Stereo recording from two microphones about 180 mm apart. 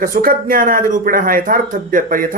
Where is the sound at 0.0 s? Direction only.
55° right (ahead or behind).